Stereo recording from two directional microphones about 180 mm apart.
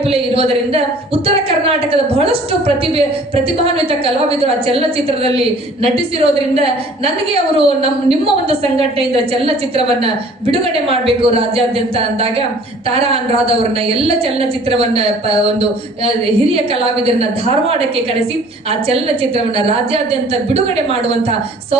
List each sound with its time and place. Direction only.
0.1 s a woman's voice: 30° right (ahead or behind)